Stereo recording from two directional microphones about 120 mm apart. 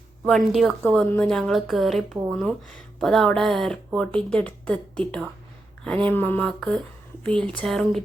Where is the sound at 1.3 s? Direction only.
5° left (ahead or behind).